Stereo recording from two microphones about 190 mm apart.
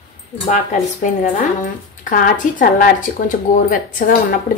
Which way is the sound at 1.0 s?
40° left (ahead or behind).